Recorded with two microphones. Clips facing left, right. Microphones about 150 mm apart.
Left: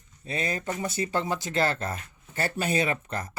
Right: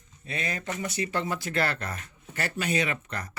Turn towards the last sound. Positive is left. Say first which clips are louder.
# left 3 dB
turn(degrees=25)  # may be behind; listen again after turning